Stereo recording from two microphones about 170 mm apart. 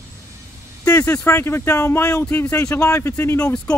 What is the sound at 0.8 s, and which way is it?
Speech, 15° left (ahead or behind).